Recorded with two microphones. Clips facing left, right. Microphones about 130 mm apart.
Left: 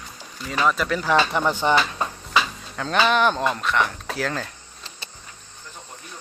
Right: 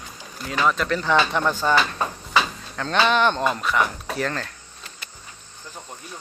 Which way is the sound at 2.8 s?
5° left (ahead or behind).